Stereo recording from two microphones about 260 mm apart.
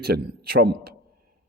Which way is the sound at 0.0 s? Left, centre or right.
Right.